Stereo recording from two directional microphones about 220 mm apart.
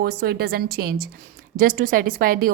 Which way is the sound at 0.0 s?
45° right (ahead or behind).